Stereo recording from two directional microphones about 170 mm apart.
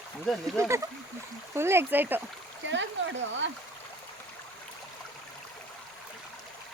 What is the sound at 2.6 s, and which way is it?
Speech, 90° right.